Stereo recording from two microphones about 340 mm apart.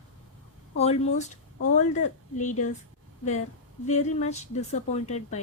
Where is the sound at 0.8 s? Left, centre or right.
Centre.